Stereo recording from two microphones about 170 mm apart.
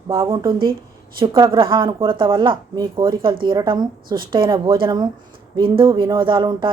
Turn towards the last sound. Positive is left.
turn(degrees=-30)  # may be behind; listen again after turning